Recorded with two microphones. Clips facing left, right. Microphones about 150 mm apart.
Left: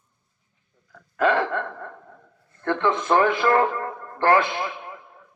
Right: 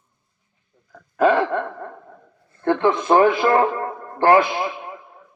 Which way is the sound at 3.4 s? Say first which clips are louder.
Right 3 dB; 25° right (ahead or behind).